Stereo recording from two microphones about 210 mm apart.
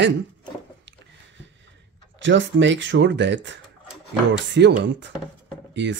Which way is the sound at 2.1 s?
60° right (ahead or behind).